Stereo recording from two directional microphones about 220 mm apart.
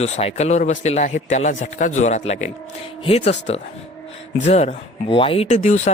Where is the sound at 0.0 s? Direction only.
30° left (ahead or behind).